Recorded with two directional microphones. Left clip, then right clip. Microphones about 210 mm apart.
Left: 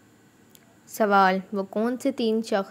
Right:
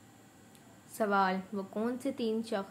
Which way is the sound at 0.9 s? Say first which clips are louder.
Left 10 dB; 35° left (ahead or behind).